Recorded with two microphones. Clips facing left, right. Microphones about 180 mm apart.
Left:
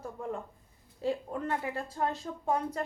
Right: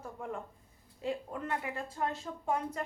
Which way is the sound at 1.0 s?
35° left (ahead or behind).